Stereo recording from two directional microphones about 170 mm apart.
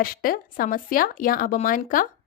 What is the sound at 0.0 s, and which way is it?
A child's voice, 60° left (ahead or behind).